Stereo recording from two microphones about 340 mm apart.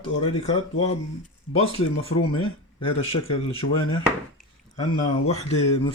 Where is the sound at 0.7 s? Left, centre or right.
Centre.